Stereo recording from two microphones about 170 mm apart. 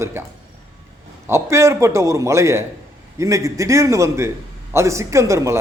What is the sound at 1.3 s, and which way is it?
A man's voice, 15° right (ahead or behind).